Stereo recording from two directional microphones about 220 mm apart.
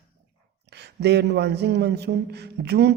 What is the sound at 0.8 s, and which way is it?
Speech, 50° right (ahead or behind).